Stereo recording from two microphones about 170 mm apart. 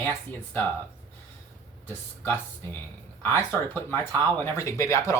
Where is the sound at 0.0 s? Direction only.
10° left (ahead or behind).